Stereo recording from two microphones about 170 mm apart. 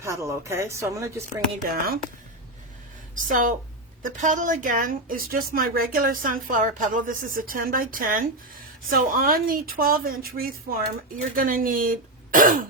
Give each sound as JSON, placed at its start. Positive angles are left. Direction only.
{"t": 0.0, "sound": "speech", "side_deg": -15}
{"t": 1.6, "sound": "speech", "side_deg": -60}
{"t": 3.2, "sound": "a woman's voice", "side_deg": -50}